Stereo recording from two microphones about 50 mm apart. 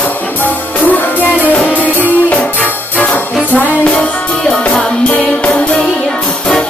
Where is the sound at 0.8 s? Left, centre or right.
Left.